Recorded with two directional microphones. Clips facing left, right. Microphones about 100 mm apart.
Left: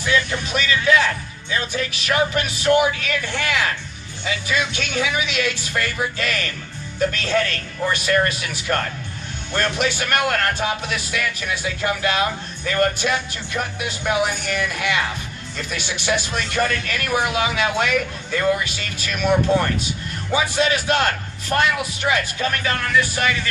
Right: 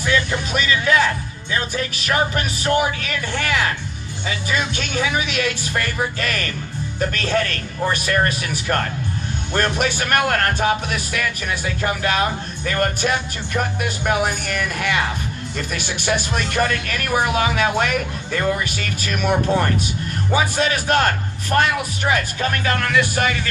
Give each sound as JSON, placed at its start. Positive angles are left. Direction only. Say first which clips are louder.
{"t": 0.5, "sound": "speech", "louder": "even", "side_deg": -40}
{"t": 1.5, "sound": "music", "louder": "right 1 dB", "side_deg": -40}
{"t": 4.3, "sound": "speech", "louder": "even", "side_deg": -40}